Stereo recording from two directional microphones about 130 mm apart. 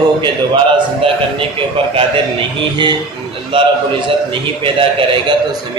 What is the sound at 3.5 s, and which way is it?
A man's voice, 40° right (ahead or behind).